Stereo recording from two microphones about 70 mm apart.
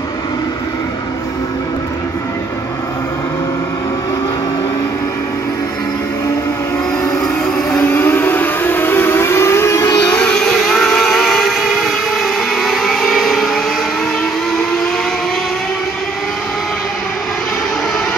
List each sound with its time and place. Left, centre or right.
7.7 s civil defense siren: left
9.9 s music: centre
10.3 s vehicle: centre